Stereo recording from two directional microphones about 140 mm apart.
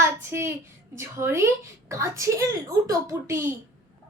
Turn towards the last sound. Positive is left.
turn(degrees=-20)  # may be behind; listen again after turning